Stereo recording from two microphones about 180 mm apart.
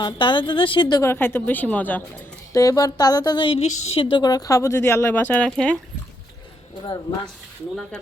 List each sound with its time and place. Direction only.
0.0 s a woman's voice: 25° left (ahead or behind); by 5.7 s 5° left (ahead or behind)